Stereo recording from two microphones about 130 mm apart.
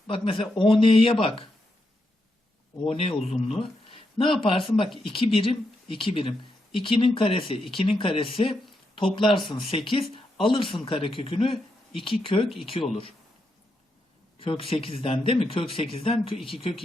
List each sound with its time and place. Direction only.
0.1 s speech: 45° left (ahead or behind)
2.9 s speech: 50° left (ahead or behind)
14.3 s speech: 45° left (ahead or behind)